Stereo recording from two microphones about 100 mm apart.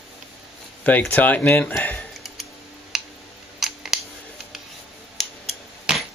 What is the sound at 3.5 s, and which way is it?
Scissors, 5° right (ahead or behind).